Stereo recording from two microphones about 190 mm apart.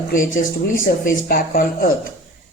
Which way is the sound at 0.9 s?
50° left (ahead or behind).